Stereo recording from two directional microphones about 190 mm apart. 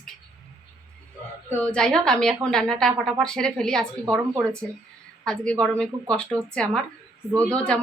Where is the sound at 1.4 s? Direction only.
5° left (ahead or behind).